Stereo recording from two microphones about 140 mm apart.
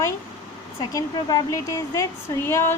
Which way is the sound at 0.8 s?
30° left (ahead or behind).